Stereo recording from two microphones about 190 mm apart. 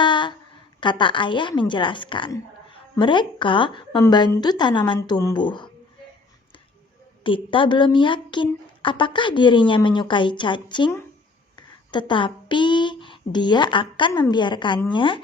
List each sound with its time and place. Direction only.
0.0 s a sound: 25° left (ahead or behind)
0.8 s speech: 25° left (ahead or behind)
7.3 s speech: 25° left (ahead or behind)